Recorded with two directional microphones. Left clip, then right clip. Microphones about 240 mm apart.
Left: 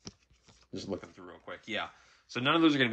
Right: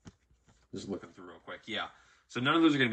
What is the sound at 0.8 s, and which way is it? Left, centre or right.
Speech, left.